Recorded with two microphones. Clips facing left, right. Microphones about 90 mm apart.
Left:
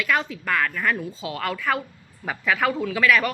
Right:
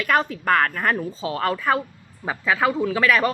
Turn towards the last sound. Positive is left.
turn(degrees=-35)  # may be behind; listen again after turning